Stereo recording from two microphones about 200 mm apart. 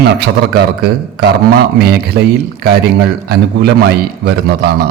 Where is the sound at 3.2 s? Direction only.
55° right (ahead or behind).